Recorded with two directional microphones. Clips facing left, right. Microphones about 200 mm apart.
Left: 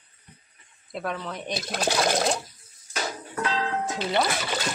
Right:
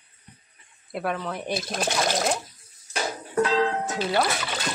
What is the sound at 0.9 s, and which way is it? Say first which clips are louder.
Speech: right 3 dB; 5° right (ahead or behind).